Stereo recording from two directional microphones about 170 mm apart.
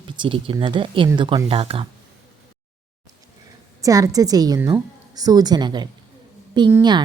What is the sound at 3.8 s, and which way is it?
A woman's voice, 20° right (ahead or behind).